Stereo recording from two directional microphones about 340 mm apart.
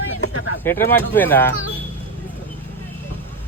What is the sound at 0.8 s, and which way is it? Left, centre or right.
Speech, centre.